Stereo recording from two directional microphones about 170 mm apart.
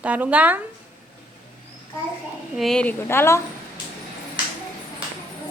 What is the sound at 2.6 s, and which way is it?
Speech, 5° left (ahead or behind).